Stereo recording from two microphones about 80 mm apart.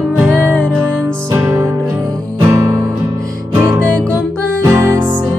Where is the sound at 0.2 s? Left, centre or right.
Right.